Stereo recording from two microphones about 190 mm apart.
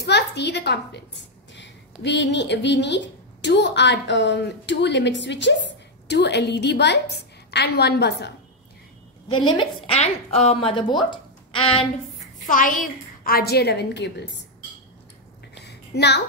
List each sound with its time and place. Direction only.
0.0 s a woman's voice: 65° left (ahead or behind)
9.4 s a woman's voice: 25° left (ahead or behind)
12.4 s a woman's voice: 45° left (ahead or behind); by 14.3 s 65° left (ahead or behind)
15.5 s a sound: 60° left (ahead or behind)